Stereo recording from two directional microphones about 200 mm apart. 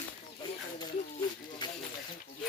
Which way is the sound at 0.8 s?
20° left (ahead or behind).